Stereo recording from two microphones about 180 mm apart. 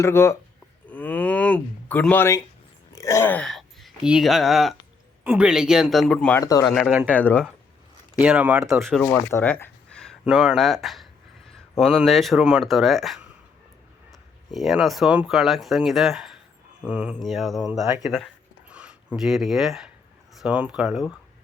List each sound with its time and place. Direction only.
0.0 s speech: 15° left (ahead or behind)
0.9 s a sound: 10° left (ahead or behind)
2.9 s speech: 15° left (ahead or behind)
6.4 s speech: 20° left (ahead or behind)
6.7 s speech: centre (ahead or behind)
8.2 s speech: 10° right (ahead or behind)